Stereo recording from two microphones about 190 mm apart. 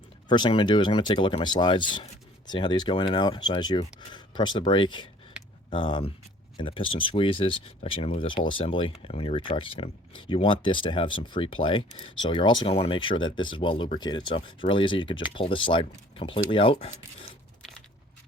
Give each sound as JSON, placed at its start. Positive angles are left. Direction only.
{"t": 0.3, "sound": "speech", "side_deg": 25}